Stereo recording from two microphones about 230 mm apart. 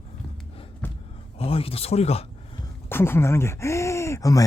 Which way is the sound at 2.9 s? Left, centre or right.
Centre.